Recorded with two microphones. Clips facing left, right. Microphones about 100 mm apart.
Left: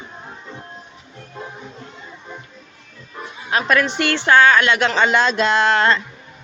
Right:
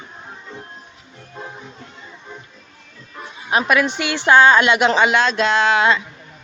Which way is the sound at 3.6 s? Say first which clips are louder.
Left 3 dB; 5° right (ahead or behind).